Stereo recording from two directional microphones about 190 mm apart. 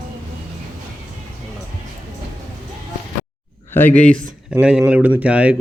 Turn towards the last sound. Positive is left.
turn(degrees=-5)  # may be behind; listen again after turning